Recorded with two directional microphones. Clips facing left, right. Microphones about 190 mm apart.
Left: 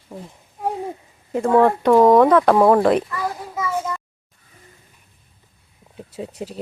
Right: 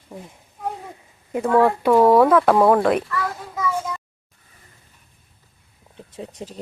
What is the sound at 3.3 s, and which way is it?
Child singing, 10° left (ahead or behind).